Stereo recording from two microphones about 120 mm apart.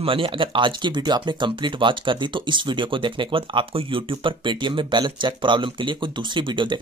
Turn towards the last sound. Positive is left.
turn(degrees=-40)  # may be behind; listen again after turning